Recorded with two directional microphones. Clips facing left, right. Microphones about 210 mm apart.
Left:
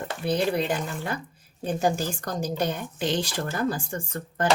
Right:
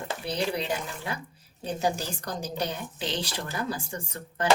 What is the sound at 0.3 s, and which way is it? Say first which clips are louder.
A woman's voice: left 5 dB; 50° left (ahead or behind).